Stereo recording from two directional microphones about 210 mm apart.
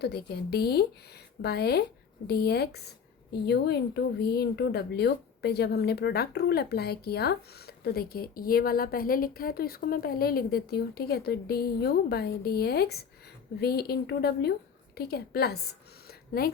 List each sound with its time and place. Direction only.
0.0 s a woman's voice: 50° left (ahead or behind)